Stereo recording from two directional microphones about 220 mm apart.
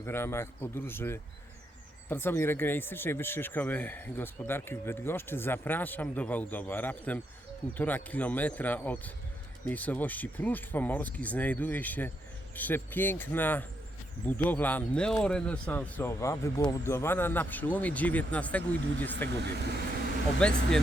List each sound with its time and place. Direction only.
0.0 s speech: 10° left (ahead or behind)
19.4 s speech: 50° right (ahead or behind)
20.4 s speech: 5° left (ahead or behind)